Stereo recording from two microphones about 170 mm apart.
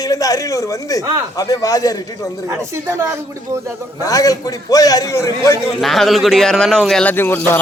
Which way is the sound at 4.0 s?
20° left (ahead or behind).